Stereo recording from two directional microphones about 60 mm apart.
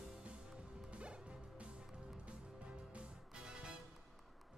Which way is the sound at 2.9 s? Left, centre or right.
Centre.